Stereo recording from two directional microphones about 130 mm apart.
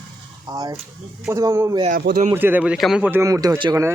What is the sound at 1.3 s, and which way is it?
A man's voice, 20° right (ahead or behind).